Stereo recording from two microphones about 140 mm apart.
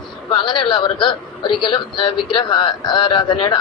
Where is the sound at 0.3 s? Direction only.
35° left (ahead or behind).